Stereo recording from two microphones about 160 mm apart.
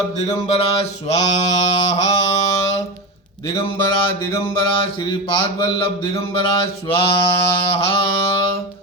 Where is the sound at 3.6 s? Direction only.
35° left (ahead or behind).